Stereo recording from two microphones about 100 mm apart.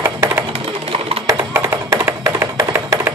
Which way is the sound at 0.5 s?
75° right (ahead or behind).